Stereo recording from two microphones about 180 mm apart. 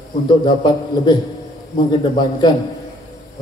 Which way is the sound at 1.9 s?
25° left (ahead or behind).